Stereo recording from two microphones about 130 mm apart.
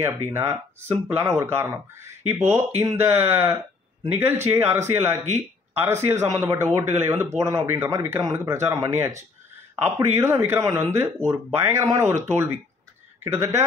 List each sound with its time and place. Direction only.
0.0 s speech: 20° right (ahead or behind)
9.8 s speech: 20° right (ahead or behind)
13.2 s speech: 20° right (ahead or behind)